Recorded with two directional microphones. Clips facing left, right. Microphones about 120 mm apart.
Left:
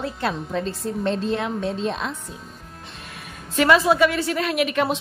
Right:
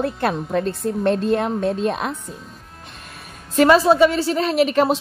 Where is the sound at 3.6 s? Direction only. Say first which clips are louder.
Right 4 dB; 35° right (ahead or behind).